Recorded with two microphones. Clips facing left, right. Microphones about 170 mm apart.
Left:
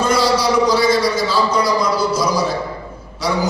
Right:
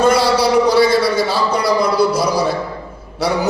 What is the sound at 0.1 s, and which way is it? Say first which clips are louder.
A man's voice: right 2 dB; 60° right (ahead or behind).